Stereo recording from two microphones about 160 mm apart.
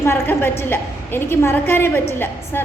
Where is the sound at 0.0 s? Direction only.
15° left (ahead or behind).